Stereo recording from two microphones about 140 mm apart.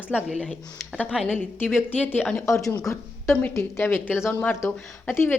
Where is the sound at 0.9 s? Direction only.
5° left (ahead or behind).